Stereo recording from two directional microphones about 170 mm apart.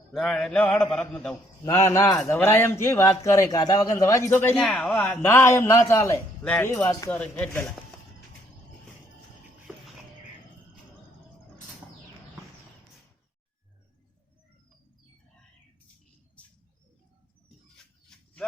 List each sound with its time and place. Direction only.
0.1 s mantra: centre (ahead or behind)
1.6 s a man's voice: 20° left (ahead or behind)
4.6 s mantra: centre (ahead or behind)
5.3 s a man's voice: 15° left (ahead or behind)
9.7 s a sound: 10° right (ahead or behind)